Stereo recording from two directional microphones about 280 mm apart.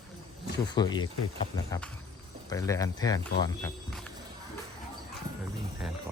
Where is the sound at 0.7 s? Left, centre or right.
Centre.